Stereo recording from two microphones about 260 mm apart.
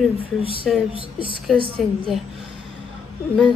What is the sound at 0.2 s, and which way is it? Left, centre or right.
Speech, centre.